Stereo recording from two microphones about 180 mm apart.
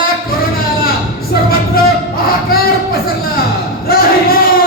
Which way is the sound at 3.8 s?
55° left (ahead or behind).